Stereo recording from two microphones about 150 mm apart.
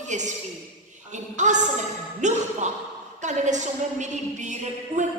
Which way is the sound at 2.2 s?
50° right (ahead or behind).